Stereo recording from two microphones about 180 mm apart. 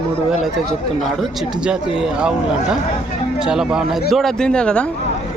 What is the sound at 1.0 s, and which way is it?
Speech, centre (ahead or behind).